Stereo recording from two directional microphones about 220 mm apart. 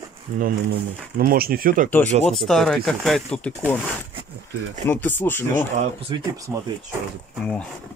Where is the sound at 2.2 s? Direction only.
Centre (ahead or behind).